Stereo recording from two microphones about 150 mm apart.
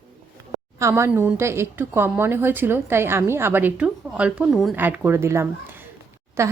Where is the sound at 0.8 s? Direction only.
20° right (ahead or behind).